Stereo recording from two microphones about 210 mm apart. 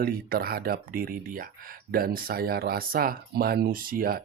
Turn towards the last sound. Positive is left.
turn(degrees=-45)  # may be behind; listen again after turning